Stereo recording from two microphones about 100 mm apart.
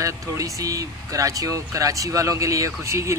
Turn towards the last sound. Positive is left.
turn(degrees=-30)  # may be behind; listen again after turning